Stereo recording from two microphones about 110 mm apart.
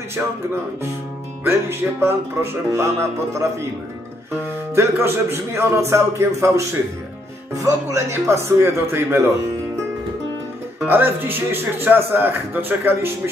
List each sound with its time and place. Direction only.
0.2 s speech: 20° right (ahead or behind)
1.4 s speech: 20° right (ahead or behind)
4.7 s speech: 25° right (ahead or behind)
10.9 s speech: 20° right (ahead or behind)